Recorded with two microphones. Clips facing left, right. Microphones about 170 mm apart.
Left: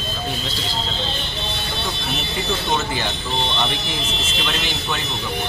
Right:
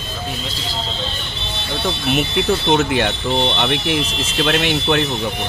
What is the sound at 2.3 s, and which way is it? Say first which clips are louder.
Speech: right 6 dB; 65° right (ahead or behind).